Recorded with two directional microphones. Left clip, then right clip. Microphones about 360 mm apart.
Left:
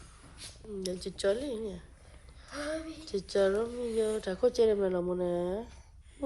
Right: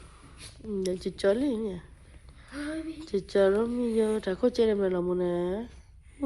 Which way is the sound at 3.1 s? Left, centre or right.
Centre.